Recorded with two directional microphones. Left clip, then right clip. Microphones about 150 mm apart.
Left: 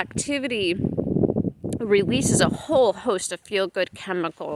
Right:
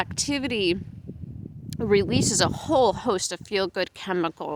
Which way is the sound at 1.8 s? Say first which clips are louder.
Left 1 dB; 25° right (ahead or behind).